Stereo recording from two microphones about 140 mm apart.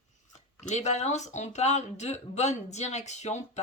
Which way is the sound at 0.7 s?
55° left (ahead or behind).